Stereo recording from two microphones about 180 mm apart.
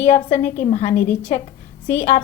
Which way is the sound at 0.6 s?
35° left (ahead or behind).